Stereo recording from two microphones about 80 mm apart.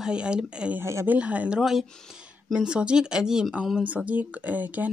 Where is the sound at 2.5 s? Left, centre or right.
Centre.